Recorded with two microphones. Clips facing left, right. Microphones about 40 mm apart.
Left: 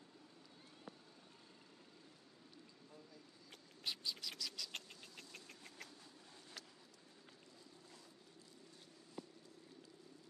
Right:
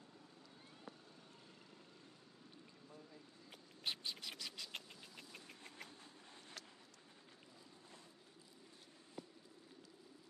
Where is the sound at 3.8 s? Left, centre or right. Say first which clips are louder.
Even; right.